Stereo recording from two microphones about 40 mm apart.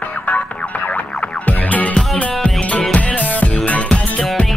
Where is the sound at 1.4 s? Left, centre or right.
Left.